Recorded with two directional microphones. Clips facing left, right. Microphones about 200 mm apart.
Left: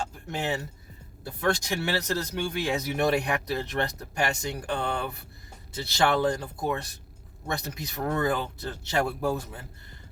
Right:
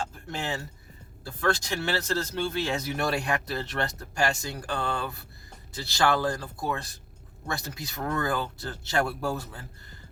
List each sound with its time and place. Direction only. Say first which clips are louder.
0.3 s speech: left 5 dB; 20° left (ahead or behind)